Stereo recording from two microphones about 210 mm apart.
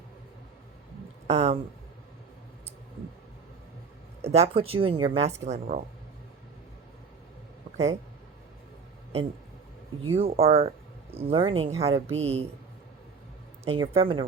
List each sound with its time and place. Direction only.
1.3 s speech: 30° right (ahead or behind)
4.2 s speech: 30° right (ahead or behind)
10.0 s speech: 30° right (ahead or behind)
13.7 s speech: 25° right (ahead or behind)